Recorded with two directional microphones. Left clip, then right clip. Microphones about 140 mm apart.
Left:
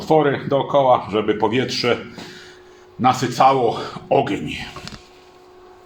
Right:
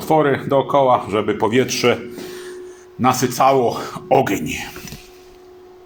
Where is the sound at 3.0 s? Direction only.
85° right; by 4.7 s 60° right (ahead or behind).